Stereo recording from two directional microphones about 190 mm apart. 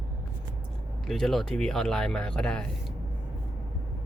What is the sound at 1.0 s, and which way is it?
Speech, centre (ahead or behind).